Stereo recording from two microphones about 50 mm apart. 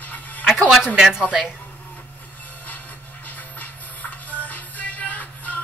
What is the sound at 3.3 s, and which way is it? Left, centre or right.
Music, left.